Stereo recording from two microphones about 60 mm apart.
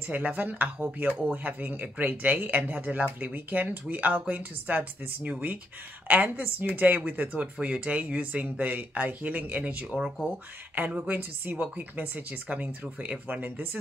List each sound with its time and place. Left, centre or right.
0.1 s speech: right